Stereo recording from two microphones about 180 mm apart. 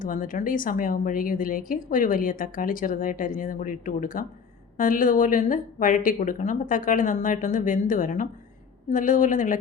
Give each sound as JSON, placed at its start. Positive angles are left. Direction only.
{"t": 0.0, "sound": "speech", "side_deg": 50}